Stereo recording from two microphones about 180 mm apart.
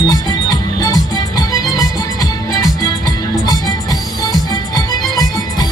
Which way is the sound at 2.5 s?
20° left (ahead or behind).